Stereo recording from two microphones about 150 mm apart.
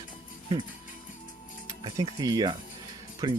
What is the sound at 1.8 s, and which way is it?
Speech, 25° right (ahead or behind).